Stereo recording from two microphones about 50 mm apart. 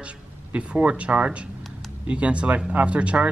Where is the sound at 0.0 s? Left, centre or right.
Right.